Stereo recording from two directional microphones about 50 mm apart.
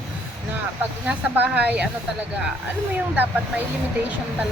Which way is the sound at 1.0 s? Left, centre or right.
Right.